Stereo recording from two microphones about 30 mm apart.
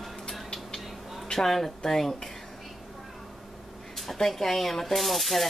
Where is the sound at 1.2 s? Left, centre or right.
Centre.